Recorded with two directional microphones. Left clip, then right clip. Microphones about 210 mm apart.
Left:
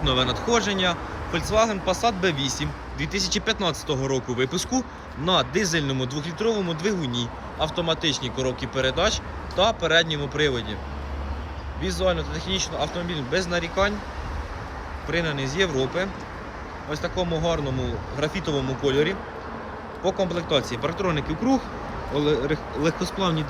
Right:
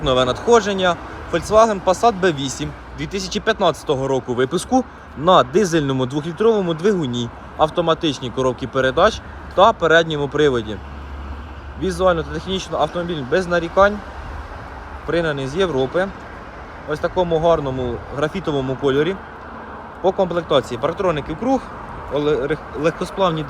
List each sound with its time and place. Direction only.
0.0 s speech: 5° left (ahead or behind)
11.8 s speech: 5° right (ahead or behind)
15.0 s speech: centre (ahead or behind)
16.9 s speech: 5° right (ahead or behind)
20.0 s speech: 70° right (ahead or behind)
20.2 s speech: 5° right (ahead or behind)